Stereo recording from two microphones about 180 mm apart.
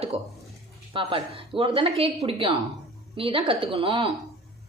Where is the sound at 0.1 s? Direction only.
30° right (ahead or behind).